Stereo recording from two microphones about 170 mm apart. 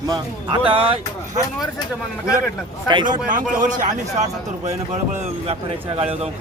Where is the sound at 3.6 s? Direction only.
45° right (ahead or behind).